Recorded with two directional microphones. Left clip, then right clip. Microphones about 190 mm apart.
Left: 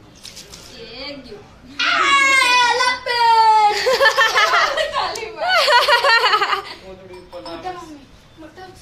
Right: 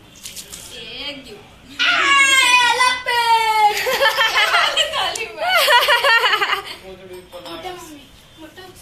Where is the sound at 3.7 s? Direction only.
25° left (ahead or behind).